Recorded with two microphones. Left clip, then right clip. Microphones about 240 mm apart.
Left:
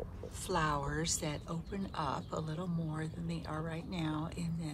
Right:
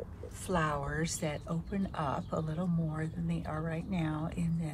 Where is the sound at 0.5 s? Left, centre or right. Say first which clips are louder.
Right 1 dB; centre.